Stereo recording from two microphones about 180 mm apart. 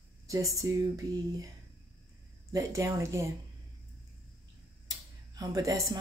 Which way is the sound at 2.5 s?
15° right (ahead or behind).